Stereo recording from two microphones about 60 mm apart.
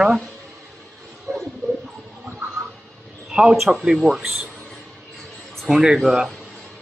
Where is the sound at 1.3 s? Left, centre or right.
Right.